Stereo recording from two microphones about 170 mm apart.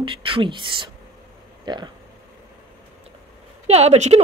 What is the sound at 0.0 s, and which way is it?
A woman's voice, 30° right (ahead or behind).